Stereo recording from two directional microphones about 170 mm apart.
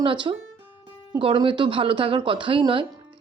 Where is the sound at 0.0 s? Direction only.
30° right (ahead or behind).